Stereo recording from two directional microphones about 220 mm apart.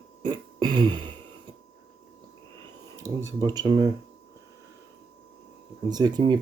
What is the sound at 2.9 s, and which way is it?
Speech, 15° right (ahead or behind).